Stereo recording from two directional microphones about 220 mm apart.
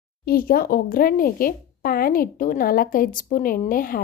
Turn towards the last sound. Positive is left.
turn(degrees=40)  # may be behind; listen again after turning